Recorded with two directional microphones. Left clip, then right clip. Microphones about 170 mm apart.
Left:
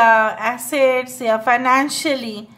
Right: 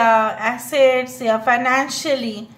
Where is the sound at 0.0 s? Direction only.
25° left (ahead or behind).